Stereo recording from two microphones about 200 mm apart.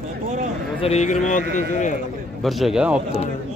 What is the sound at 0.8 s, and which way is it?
Speech, 35° left (ahead or behind).